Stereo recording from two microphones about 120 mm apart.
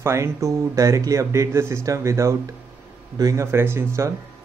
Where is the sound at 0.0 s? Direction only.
25° right (ahead or behind).